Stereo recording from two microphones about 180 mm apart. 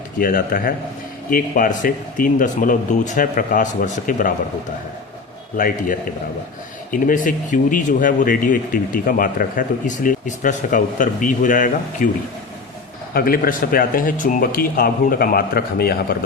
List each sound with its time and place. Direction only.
0.2 s speech: 50° left (ahead or behind)
5.5 s speech: 50° left (ahead or behind)
13.1 s speech: 55° left (ahead or behind)